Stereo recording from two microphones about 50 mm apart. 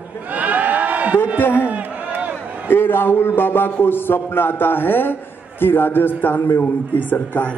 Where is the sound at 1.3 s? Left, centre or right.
Left.